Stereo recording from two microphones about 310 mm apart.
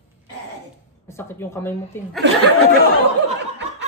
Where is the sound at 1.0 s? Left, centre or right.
Centre.